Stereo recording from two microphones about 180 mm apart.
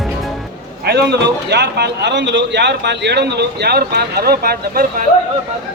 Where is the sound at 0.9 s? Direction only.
70° right (ahead or behind); by 5.0 s 55° right (ahead or behind).